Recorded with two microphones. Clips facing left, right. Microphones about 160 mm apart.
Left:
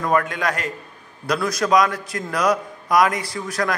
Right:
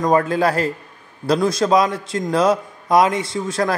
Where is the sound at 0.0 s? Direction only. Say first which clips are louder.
Right 5 dB; 30° right (ahead or behind).